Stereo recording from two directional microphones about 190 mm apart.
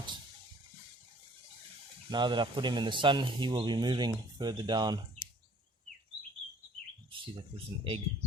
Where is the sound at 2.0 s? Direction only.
25° right (ahead or behind).